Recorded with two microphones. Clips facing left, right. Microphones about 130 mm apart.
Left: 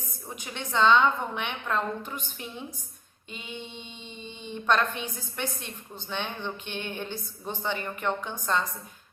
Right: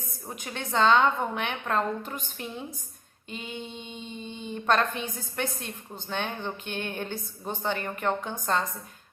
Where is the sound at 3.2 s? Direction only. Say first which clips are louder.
Right 3 dB; 45° right (ahead or behind).